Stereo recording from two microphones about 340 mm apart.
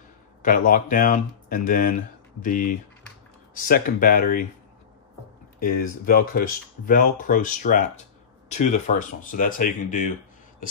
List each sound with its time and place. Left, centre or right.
0.4 s speech: left
5.6 s speech: left